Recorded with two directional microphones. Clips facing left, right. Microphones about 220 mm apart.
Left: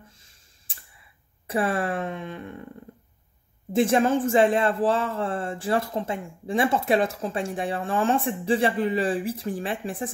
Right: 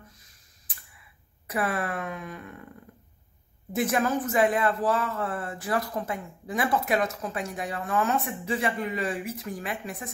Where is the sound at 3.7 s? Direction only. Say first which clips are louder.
Left 5 dB; 25° left (ahead or behind).